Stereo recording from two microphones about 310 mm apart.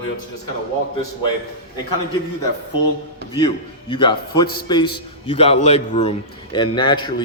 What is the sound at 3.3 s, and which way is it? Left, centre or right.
A man's voice, centre.